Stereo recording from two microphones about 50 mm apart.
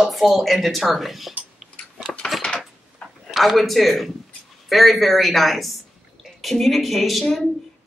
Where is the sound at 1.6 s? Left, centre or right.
Centre.